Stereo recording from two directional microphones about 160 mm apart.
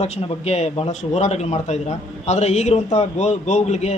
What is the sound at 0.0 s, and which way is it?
A man's voice, 40° left (ahead or behind).